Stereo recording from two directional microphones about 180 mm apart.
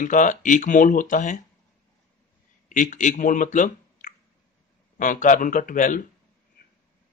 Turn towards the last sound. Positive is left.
turn(degrees=45)  # may be behind; listen again after turning